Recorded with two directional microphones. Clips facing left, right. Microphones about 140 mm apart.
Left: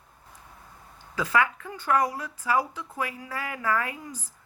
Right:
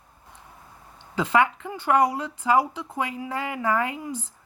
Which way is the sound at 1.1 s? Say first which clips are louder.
Right 4 dB; 25° right (ahead or behind).